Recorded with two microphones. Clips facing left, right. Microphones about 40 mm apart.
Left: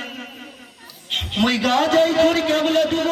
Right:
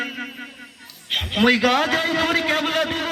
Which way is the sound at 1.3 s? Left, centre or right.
Right.